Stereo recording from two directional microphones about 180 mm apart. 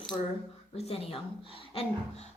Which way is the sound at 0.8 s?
35° left (ahead or behind).